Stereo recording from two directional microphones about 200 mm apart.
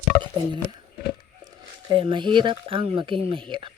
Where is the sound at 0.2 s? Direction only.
25° right (ahead or behind).